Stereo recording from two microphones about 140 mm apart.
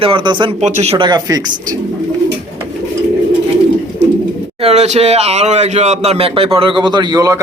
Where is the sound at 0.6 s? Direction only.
50° right (ahead or behind).